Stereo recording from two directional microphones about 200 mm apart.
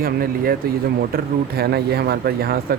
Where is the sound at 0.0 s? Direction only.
50° right (ahead or behind).